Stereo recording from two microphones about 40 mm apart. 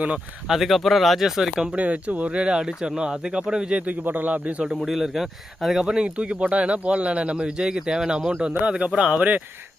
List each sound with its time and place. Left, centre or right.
0.4 s speech: centre
1.7 s speech: right; by 3.8 s centre
4.0 s a man's voice: right
4.8 s speech: centre
5.9 s speech: right
9.1 s speech: right